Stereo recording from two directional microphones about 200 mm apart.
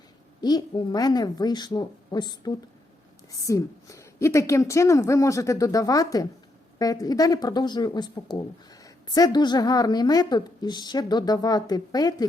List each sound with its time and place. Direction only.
0.4 s a woman's voice: 20° left (ahead or behind)